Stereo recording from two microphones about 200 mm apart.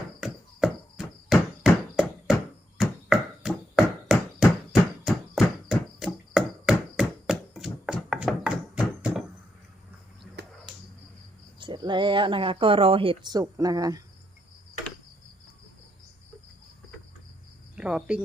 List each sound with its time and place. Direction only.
0.2 s hammer: centre (ahead or behind)
2.7 s a sound: centre (ahead or behind)
11.6 s speech: 25° right (ahead or behind)
17.7 s speech: 5° right (ahead or behind)